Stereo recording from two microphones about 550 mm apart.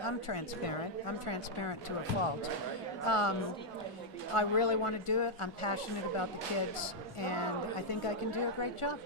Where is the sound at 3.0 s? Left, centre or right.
Left.